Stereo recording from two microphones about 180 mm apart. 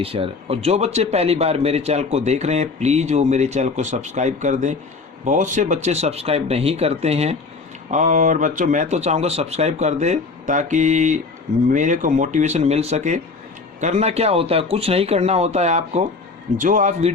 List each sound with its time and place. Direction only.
0.0 s a man's voice: 30° right (ahead or behind)